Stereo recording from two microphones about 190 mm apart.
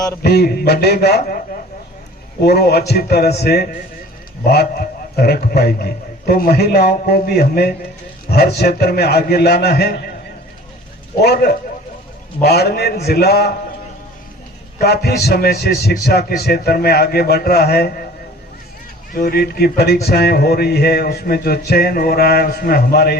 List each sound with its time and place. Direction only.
0.2 s a man's voice: 55° left (ahead or behind)
2.4 s a man's voice: 55° left (ahead or behind)
11.2 s a man's voice: 55° left (ahead or behind)
14.8 s a man's voice: 55° left (ahead or behind)
19.1 s a man's voice: 50° left (ahead or behind)